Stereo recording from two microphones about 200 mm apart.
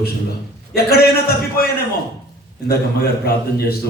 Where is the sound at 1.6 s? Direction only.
45° left (ahead or behind).